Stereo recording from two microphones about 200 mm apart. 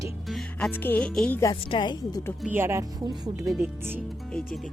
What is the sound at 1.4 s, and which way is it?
Speech, 20° left (ahead or behind).